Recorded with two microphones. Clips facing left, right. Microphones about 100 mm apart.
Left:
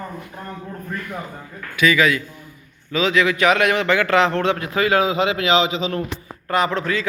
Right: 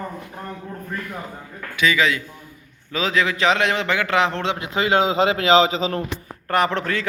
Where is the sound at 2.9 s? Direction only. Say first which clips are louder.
Left 3 dB; 35° right (ahead or behind).